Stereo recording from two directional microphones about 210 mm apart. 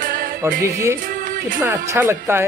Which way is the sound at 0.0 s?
40° right (ahead or behind).